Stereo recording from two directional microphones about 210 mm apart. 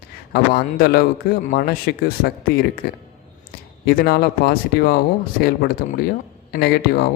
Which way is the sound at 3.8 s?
50° left (ahead or behind).